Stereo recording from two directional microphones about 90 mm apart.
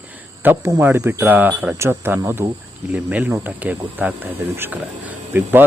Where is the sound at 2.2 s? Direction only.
35° right (ahead or behind).